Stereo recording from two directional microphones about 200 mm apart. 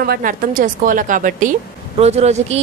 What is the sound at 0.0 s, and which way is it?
A woman's voice, 45° right (ahead or behind).